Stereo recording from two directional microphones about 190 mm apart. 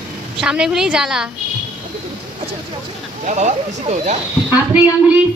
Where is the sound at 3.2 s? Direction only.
40° right (ahead or behind).